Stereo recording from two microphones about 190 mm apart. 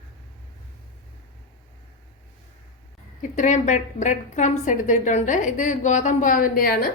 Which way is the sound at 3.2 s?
40° left (ahead or behind).